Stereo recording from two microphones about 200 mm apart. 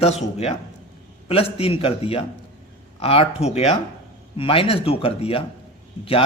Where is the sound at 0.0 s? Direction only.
30° left (ahead or behind).